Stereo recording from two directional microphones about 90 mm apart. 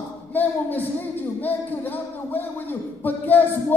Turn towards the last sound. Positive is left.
turn(degrees=20)  # may be behind; listen again after turning